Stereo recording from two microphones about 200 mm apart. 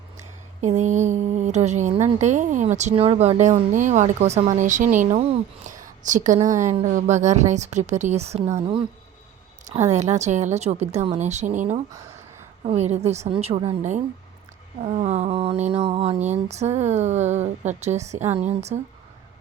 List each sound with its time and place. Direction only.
0.6 s a woman's voice: 35° right (ahead or behind)